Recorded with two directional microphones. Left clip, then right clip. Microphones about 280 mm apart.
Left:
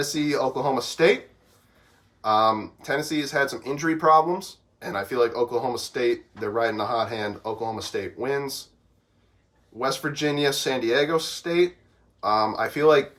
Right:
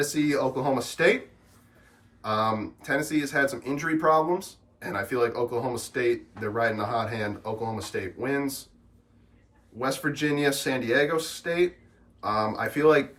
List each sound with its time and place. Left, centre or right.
0.0 s speech: left
2.2 s speech: left
9.7 s speech: left